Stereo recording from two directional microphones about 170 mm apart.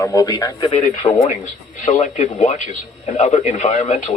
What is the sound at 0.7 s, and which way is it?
Speech, 40° left (ahead or behind).